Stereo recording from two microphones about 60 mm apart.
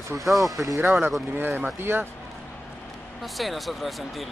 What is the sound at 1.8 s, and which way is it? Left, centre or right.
Speech, right.